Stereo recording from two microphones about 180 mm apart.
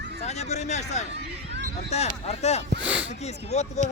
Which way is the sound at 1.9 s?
35° left (ahead or behind).